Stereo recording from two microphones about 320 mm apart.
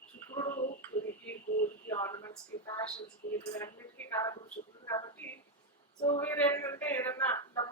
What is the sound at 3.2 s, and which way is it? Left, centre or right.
Speech, left.